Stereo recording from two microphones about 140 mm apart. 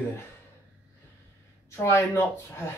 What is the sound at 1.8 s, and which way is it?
Speech, 20° left (ahead or behind).